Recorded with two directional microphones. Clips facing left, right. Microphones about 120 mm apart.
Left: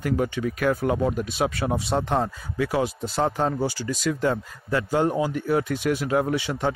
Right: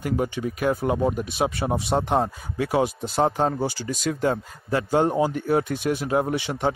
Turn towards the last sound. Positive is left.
turn(degrees=-25)  # may be behind; listen again after turning